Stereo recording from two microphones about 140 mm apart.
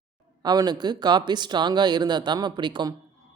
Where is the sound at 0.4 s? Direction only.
30° right (ahead or behind).